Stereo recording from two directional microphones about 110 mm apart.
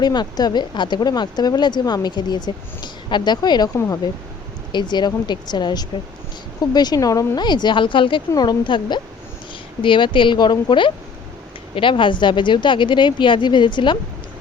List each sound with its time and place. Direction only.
0.0 s speech: 40° left (ahead or behind)
4.7 s speech: 40° left (ahead or behind)
8.3 s speech: 40° left (ahead or behind)